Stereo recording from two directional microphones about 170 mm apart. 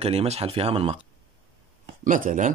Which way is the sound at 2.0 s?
50° right (ahead or behind).